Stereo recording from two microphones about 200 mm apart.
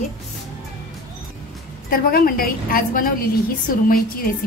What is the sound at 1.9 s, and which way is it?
A woman's voice, 45° left (ahead or behind).